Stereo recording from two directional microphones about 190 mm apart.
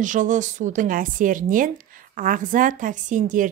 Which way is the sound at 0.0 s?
40° right (ahead or behind).